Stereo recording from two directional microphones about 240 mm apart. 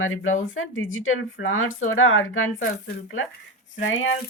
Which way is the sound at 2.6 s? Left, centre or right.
Left.